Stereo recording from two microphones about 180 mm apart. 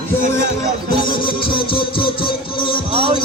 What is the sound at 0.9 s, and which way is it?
Music, 25° left (ahead or behind).